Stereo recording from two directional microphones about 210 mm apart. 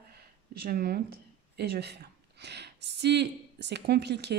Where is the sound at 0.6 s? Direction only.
45° right (ahead or behind).